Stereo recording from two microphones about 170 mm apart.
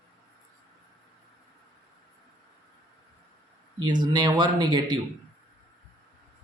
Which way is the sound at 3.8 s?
25° right (ahead or behind).